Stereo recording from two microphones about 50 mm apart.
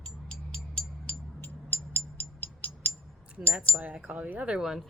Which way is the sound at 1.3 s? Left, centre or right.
Left.